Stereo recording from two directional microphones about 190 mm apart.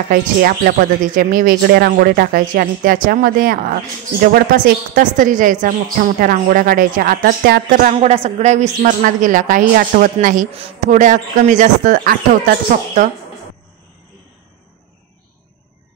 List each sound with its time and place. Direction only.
0.1 s a woman's voice: 45° right (ahead or behind)
7.7 s a woman's voice: 40° right (ahead or behind)